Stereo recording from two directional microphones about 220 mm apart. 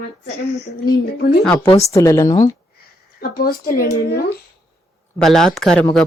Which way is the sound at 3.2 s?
40° left (ahead or behind).